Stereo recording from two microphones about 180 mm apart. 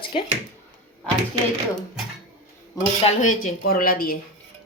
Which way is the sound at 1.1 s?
5° left (ahead or behind).